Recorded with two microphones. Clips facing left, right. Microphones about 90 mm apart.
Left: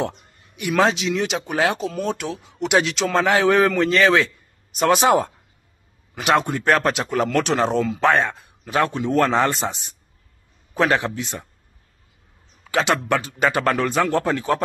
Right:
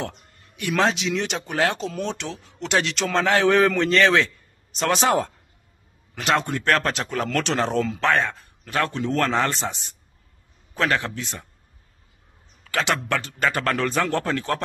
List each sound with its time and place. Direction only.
0.0 s a sound: 15° left (ahead or behind)
0.7 s a man's voice: 5° left (ahead or behind)
12.6 s a man's voice: 15° left (ahead or behind)